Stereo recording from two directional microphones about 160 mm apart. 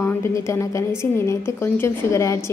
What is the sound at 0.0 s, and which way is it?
A woman's voice, 15° left (ahead or behind).